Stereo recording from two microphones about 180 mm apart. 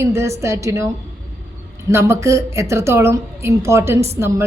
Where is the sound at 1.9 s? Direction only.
15° right (ahead or behind).